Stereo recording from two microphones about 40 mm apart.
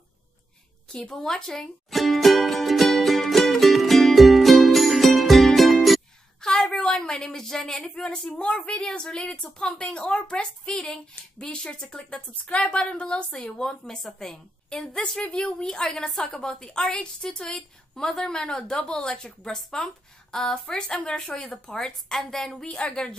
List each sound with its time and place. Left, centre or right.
0.9 s a woman's voice: centre
1.9 s music: centre
6.4 s a sound: centre
7.2 s a woman's voice: centre
8.3 s speech: left
8.8 s a woman's voice: centre
22.6 s a woman's voice: left